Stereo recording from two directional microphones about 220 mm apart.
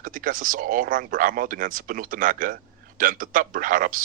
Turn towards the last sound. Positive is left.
turn(degrees=-40)  # may be behind; listen again after turning